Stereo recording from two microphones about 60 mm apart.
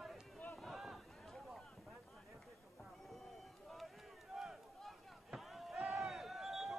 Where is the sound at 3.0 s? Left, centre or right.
Centre.